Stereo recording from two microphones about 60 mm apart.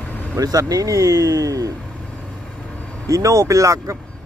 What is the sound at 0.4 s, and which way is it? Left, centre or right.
Speech, right.